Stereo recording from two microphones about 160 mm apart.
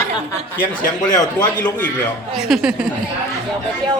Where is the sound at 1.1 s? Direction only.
25° left (ahead or behind).